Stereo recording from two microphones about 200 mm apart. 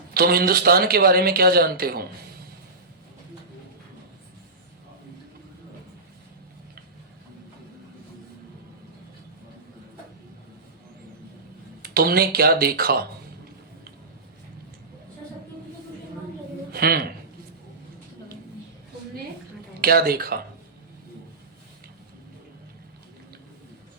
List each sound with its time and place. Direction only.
0.1 s a man's voice: 50° right (ahead or behind)
11.8 s speech: 50° right (ahead or behind)
16.7 s speech: 50° right (ahead or behind)
19.8 s a man's voice: 50° right (ahead or behind)